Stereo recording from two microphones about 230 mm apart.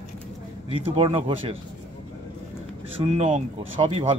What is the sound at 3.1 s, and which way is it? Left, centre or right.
A man's voice, right.